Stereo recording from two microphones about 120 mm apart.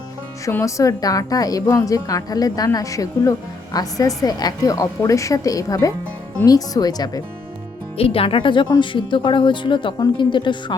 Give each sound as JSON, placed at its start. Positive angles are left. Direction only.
{"t": 0.6, "sound": "a woman's voice", "side_deg": 25}
{"t": 7.9, "sound": "speech", "side_deg": 50}